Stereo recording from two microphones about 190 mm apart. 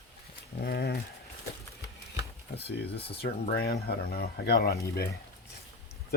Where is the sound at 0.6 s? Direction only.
55° left (ahead or behind).